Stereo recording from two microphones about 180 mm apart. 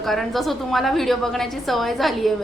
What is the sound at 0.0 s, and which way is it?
A woman's voice, centre (ahead or behind).